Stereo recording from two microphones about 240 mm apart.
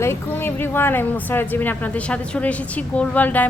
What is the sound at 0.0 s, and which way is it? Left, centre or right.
A woman's voice, centre.